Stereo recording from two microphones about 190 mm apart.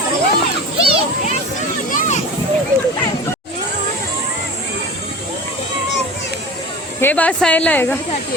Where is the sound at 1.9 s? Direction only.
40° left (ahead or behind).